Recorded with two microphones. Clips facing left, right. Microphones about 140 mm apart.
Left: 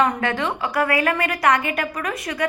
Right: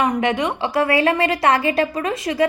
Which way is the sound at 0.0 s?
20° right (ahead or behind).